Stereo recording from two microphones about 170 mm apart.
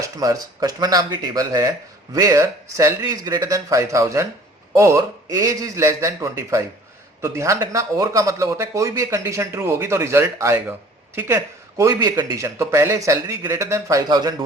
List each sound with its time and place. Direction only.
0.2 s a man's voice: 20° right (ahead or behind)